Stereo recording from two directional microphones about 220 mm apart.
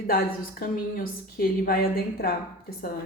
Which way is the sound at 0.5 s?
40° left (ahead or behind).